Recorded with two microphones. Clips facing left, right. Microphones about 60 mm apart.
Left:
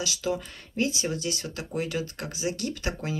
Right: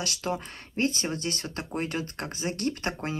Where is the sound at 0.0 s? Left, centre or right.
Right.